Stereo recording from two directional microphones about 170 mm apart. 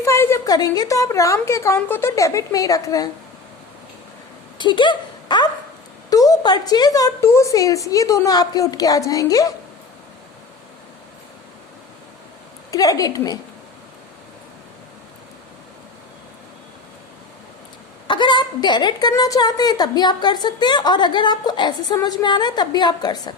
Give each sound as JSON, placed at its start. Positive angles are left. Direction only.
{"t": 0.0, "sound": "a woman's voice", "side_deg": 15}
{"t": 4.5, "sound": "a woman's voice", "side_deg": 25}
{"t": 12.7, "sound": "a woman's voice", "side_deg": 20}
{"t": 18.1, "sound": "a woman's voice", "side_deg": 30}